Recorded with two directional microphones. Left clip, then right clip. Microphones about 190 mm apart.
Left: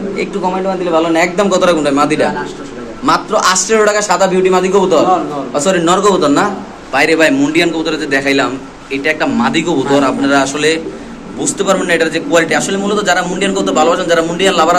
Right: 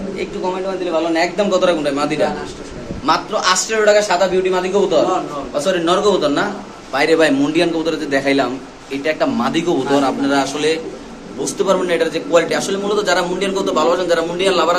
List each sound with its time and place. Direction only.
1.1 s a man's voice: 25° left (ahead or behind)
6.9 s a man's voice: 10° right (ahead or behind)
7.2 s a man's voice: 20° right (ahead or behind); by 14.8 s centre (ahead or behind)